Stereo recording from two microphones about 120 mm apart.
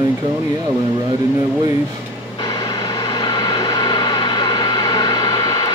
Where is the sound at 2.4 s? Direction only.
35° left (ahead or behind).